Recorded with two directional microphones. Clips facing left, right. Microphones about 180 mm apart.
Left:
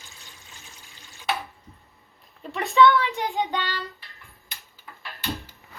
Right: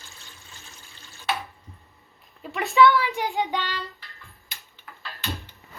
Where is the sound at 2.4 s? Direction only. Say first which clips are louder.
Even; centre (ahead or behind).